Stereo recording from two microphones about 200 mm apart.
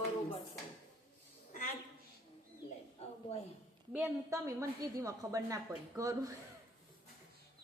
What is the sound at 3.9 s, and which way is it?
A woman's voice, 10° right (ahead or behind).